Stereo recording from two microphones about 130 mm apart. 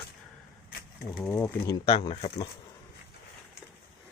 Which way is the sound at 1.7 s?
40° left (ahead or behind).